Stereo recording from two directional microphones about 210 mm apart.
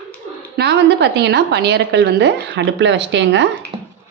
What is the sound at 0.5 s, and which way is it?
A woman's voice, 55° right (ahead or behind).